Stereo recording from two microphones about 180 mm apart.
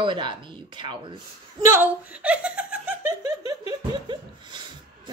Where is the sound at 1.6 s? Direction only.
10° right (ahead or behind).